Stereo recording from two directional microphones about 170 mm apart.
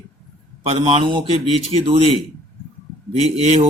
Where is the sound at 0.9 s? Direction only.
30° right (ahead or behind).